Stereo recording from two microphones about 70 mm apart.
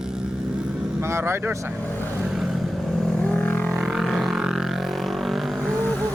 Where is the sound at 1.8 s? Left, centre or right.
Left.